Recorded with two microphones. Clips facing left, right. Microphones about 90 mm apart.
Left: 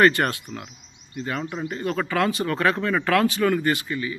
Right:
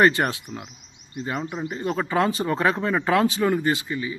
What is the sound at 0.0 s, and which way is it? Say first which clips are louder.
Speech: even; 15° right (ahead or behind).